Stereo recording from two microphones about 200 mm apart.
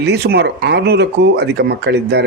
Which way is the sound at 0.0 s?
55° right (ahead or behind).